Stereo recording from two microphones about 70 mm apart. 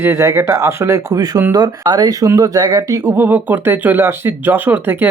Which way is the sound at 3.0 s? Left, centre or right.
Right.